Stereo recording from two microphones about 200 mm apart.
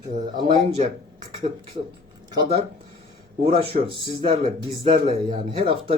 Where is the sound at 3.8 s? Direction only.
25° right (ahead or behind).